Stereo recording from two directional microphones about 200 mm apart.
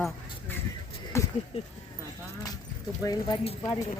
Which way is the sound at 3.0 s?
20° left (ahead or behind).